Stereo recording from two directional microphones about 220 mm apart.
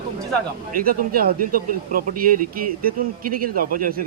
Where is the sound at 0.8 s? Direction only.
40° right (ahead or behind).